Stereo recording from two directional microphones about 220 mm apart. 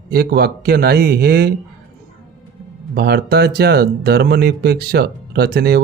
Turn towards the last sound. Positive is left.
turn(degrees=-45)  # may be behind; listen again after turning